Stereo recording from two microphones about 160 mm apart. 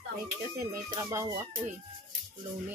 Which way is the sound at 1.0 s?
20° right (ahead or behind).